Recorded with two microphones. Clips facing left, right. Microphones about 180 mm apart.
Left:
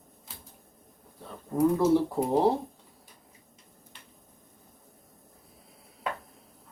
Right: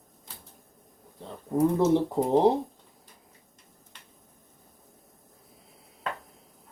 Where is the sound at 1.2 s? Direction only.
25° right (ahead or behind).